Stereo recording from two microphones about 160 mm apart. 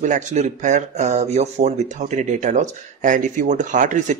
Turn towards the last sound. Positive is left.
turn(degrees=-50)  # may be behind; listen again after turning